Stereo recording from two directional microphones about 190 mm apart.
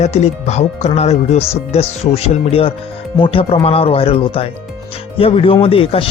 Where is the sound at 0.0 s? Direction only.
35° left (ahead or behind).